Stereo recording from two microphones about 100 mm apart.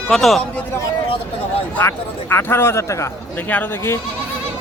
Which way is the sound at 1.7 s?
20° left (ahead or behind).